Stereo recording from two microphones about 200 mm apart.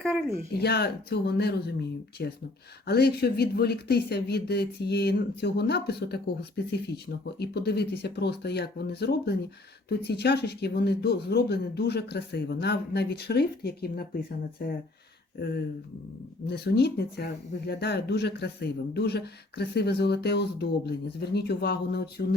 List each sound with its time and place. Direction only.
0.0 s speech: centre (ahead or behind)
0.5 s speech: 55° left (ahead or behind)
16.5 s speech: 55° left (ahead or behind)